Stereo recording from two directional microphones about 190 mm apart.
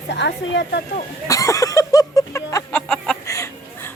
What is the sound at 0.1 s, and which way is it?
Speech, 65° left (ahead or behind).